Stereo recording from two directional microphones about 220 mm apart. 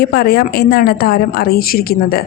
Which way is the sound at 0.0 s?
45° left (ahead or behind).